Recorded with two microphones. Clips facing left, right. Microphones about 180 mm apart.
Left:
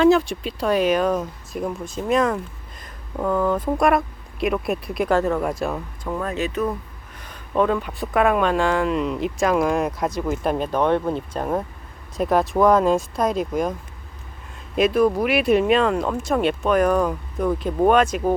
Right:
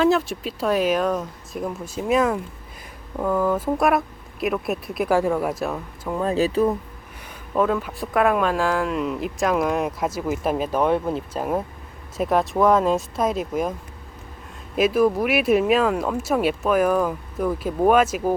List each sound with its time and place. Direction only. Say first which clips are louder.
0.0 s speech: left 3 dB; centre (ahead or behind)
6.1 s speech: right 5 dB; 30° right (ahead or behind)
7.2 s speech: left 1 dB; 5° right (ahead or behind)
14.8 s speech: left 1 dB; 5° right (ahead or behind)